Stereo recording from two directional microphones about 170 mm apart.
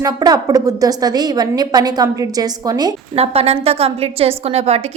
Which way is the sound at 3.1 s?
35° right (ahead or behind).